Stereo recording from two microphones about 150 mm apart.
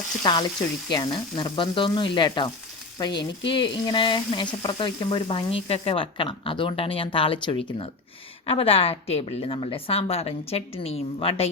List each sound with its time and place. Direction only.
0.2 s speech: 30° left (ahead or behind)
0.9 s frying: 30° left (ahead or behind)